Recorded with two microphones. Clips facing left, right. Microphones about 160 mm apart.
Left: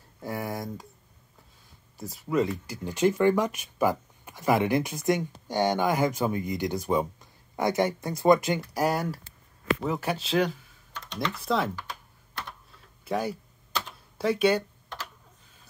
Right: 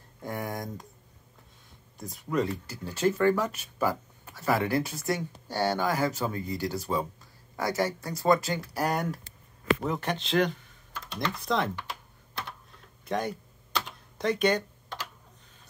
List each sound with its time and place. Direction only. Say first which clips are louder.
0.2 s speech: left 2 dB; 5° left (ahead or behind)
2.0 s speech: left 3 dB; 5° left (ahead or behind)
8.8 s speech: left 2 dB; 5° left (ahead or behind)
13.0 s computer keyboard: left 1 dB; 5° left (ahead or behind)